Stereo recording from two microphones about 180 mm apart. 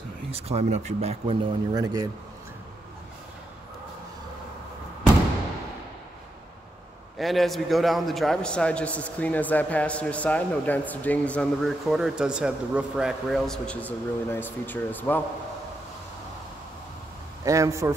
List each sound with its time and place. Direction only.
0.3 s speech: 35° right (ahead or behind)
7.2 s a man's voice: centre (ahead or behind)
17.5 s speech: 15° right (ahead or behind)